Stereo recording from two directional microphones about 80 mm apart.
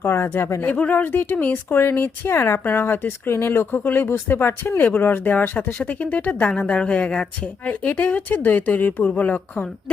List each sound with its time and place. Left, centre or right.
0.0 s speech: left
0.7 s a woman's voice: left